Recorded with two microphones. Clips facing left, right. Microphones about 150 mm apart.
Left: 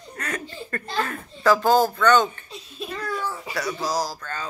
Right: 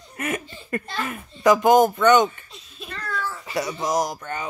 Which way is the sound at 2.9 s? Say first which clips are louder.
Left 1 dB; 10° left (ahead or behind).